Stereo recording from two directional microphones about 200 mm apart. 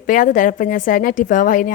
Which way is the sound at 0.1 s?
40° left (ahead or behind).